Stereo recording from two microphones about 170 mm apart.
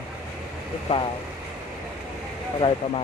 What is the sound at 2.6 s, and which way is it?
Speech, 30° left (ahead or behind).